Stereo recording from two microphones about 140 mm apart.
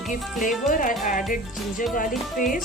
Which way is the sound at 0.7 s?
70° left (ahead or behind).